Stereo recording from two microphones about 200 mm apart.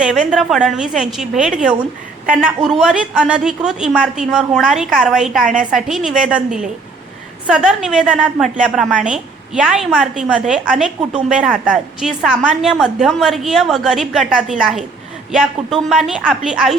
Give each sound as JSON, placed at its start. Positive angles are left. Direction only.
{"t": 0.0, "sound": "a woman's voice", "side_deg": -5}